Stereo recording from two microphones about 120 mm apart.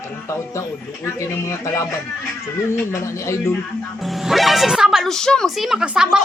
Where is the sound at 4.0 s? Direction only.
Centre (ahead or behind).